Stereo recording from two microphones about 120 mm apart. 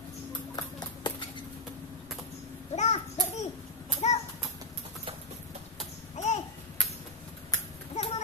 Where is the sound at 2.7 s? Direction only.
70° left (ahead or behind).